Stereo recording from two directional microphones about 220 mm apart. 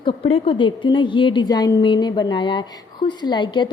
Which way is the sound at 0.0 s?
25° left (ahead or behind).